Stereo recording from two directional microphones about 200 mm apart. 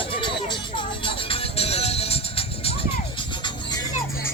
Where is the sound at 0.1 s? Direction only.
25° left (ahead or behind).